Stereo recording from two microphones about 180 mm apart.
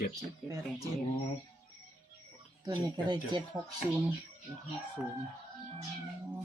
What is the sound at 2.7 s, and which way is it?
Speech, 20° right (ahead or behind).